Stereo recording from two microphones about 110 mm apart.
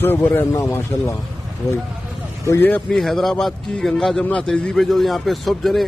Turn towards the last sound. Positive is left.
turn(degrees=0)  # may be behind; listen again after turning